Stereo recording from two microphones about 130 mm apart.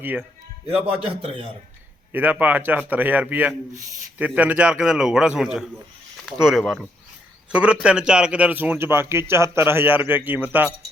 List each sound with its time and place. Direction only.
0.0 s a man's voice: 15° right (ahead or behind)
1.0 s a man's voice: 45° right (ahead or behind)
2.1 s a man's voice: 15° right (ahead or behind)